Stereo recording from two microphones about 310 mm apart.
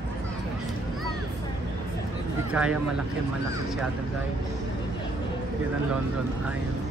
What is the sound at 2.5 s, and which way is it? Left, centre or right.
Speech, centre.